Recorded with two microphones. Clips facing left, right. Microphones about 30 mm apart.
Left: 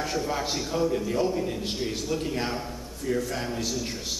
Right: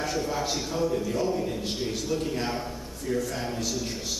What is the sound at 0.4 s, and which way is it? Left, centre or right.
A man's voice, centre.